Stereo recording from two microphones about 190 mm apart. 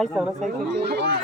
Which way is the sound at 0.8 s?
60° right (ahead or behind).